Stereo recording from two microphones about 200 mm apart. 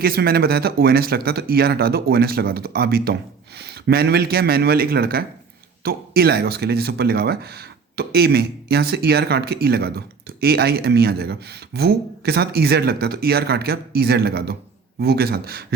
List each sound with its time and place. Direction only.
0.0 s speech: 50° right (ahead or behind)